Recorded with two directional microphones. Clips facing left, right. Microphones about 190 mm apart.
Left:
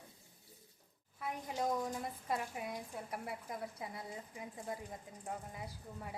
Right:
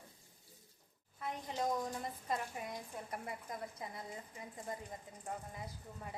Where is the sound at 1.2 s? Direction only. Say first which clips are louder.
Even; 10° left (ahead or behind).